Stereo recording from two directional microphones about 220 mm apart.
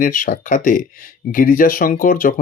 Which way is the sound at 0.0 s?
40° left (ahead or behind).